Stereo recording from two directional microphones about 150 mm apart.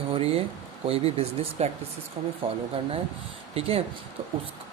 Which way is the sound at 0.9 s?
40° right (ahead or behind).